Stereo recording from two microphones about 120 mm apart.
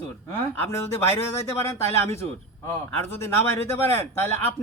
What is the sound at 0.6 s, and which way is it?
A man's voice, 20° left (ahead or behind).